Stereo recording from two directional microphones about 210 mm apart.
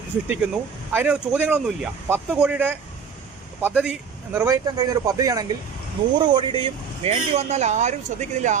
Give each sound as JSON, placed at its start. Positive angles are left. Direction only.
{"t": 0.3, "sound": "speech", "side_deg": -5}